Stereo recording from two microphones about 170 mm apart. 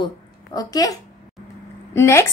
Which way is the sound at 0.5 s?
20° left (ahead or behind).